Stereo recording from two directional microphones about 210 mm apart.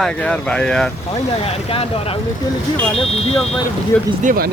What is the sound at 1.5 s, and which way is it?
Speech, 30° left (ahead or behind).